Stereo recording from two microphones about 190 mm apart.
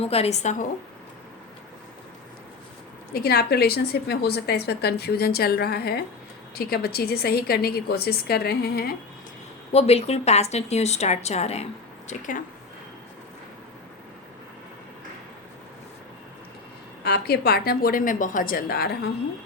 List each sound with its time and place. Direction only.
0.0 s a woman's voice: 30° left (ahead or behind)
3.1 s a woman's voice: 55° left (ahead or behind)
9.7 s a woman's voice: 35° left (ahead or behind)
17.0 s a woman's voice: 60° left (ahead or behind)